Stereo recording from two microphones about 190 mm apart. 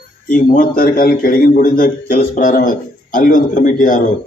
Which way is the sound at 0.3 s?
45° left (ahead or behind).